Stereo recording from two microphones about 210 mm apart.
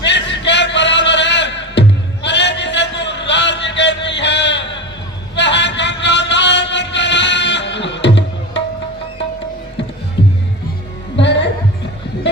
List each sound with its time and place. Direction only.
0.0 s a sound: 55° left (ahead or behind)
5.4 s music: 55° left (ahead or behind)
10.2 s music: 55° left (ahead or behind)